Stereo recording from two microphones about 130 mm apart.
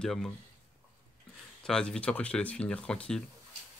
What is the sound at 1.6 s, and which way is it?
Speech, 5° left (ahead or behind).